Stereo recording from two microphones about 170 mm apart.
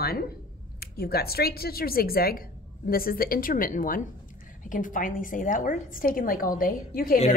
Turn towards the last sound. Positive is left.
turn(degrees=60)  # may be behind; listen again after turning